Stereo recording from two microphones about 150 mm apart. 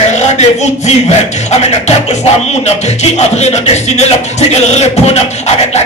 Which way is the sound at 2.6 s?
45° left (ahead or behind).